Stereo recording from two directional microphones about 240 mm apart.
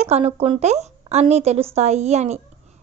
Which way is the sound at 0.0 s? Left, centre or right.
Right.